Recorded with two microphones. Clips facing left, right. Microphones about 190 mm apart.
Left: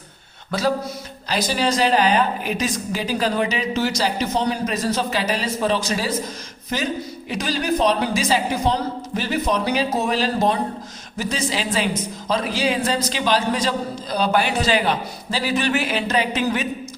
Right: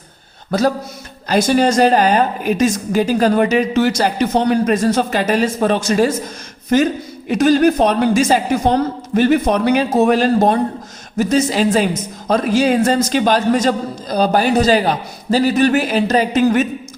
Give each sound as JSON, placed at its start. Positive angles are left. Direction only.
{"t": 1.3, "sound": "a woman's voice", "side_deg": -50}